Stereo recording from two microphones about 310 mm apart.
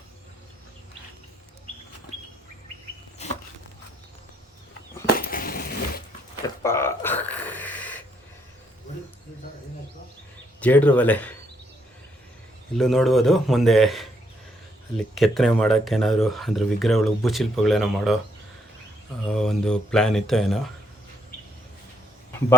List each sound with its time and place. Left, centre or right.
3.2 s a sound: left
5.3 s crushing: left
6.6 s a sound: centre
10.6 s speech: centre
12.7 s speech: centre
19.3 s speech: centre